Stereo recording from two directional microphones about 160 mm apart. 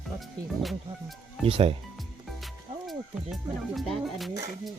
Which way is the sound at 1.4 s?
35° right (ahead or behind).